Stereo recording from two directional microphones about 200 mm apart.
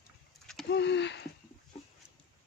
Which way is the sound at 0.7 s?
60° left (ahead or behind).